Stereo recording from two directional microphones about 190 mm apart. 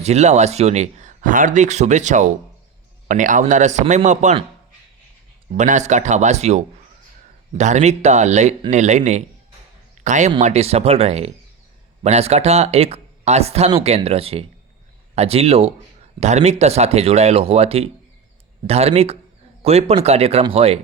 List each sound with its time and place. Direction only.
0.0 s speech: 35° right (ahead or behind)
5.5 s speech: 40° right (ahead or behind)
7.6 s speech: 40° right (ahead or behind)